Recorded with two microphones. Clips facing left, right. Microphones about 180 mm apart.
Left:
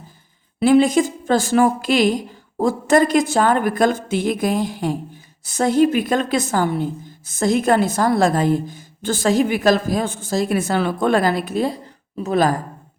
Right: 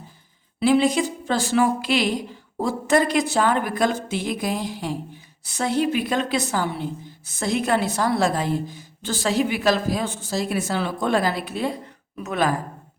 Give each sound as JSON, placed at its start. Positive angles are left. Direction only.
{"t": 0.6, "sound": "a woman's voice", "side_deg": 50}